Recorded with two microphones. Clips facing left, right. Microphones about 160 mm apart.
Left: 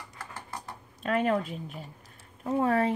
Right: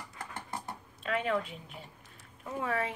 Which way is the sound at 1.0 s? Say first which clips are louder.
Left 5 dB; 45° left (ahead or behind).